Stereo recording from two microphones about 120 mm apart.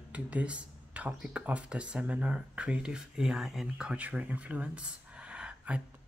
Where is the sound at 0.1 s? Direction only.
10° right (ahead or behind).